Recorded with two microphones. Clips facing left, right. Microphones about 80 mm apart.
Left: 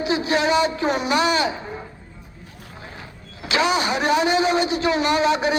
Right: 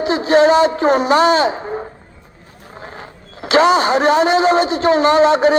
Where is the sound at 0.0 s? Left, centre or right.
Right.